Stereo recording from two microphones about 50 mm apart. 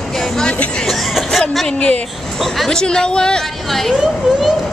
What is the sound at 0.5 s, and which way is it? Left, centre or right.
Speech, left.